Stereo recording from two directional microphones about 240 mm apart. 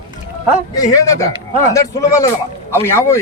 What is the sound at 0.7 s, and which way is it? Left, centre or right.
Speech, centre.